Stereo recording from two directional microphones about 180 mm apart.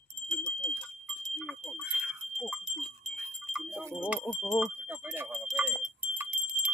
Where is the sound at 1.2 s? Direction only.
Centre (ahead or behind).